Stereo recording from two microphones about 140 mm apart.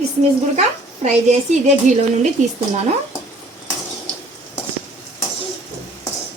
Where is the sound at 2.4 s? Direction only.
60° right (ahead or behind).